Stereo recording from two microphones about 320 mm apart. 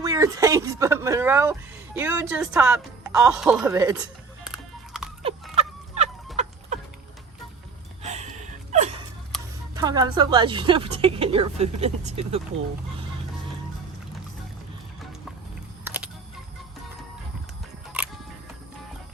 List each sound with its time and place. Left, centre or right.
0.0 s a woman's voice: centre
2.3 s music: centre
5.5 s fowl: centre
6.3 s chicken: right
8.0 s gasp: right
9.7 s a woman's voice: centre
15.8 s music: centre